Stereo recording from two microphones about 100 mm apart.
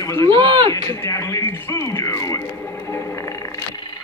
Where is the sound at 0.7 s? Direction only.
35° left (ahead or behind).